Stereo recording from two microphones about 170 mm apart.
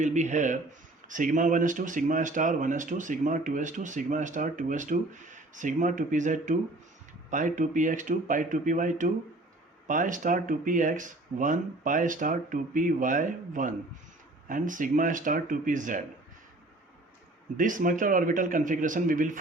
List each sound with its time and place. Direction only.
0.0 s speech: 45° right (ahead or behind)
17.6 s speech: 50° right (ahead or behind)